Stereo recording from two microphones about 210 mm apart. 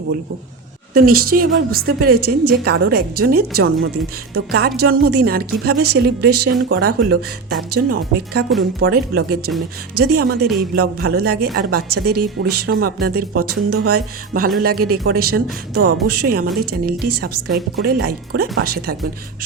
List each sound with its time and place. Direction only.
0.9 s speech: 45° right (ahead or behind)